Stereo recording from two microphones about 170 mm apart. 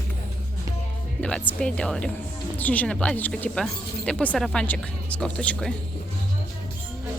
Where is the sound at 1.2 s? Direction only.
5° left (ahead or behind).